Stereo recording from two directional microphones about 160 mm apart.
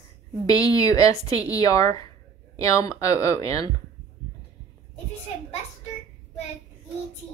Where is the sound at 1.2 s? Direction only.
35° right (ahead or behind).